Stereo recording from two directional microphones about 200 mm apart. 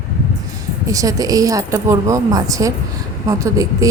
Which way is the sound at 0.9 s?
15° right (ahead or behind).